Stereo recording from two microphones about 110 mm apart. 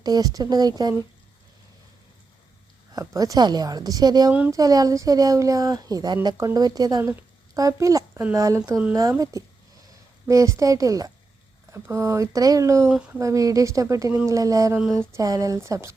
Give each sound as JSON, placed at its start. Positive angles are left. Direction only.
{"t": 0.0, "sound": "speech", "side_deg": -35}
{"t": 2.9, "sound": "speech", "side_deg": -30}
{"t": 4.3, "sound": "speech", "side_deg": -15}
{"t": 4.5, "sound": "a woman's voice", "side_deg": -35}
{"t": 12.9, "sound": "speech", "side_deg": -10}
{"t": 13.1, "sound": "speech", "side_deg": -30}